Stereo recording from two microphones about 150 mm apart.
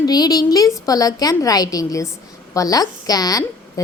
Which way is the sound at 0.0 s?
25° left (ahead or behind).